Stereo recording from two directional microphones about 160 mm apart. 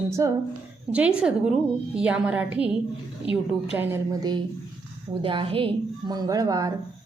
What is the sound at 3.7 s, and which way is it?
A woman's voice, 15° right (ahead or behind).